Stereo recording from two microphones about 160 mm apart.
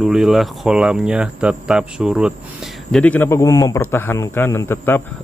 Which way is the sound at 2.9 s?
10° left (ahead or behind).